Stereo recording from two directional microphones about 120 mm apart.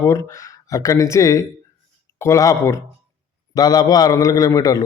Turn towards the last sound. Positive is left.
turn(degrees=30)  # may be behind; listen again after turning